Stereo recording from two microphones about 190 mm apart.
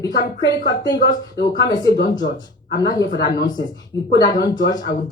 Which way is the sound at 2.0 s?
40° left (ahead or behind).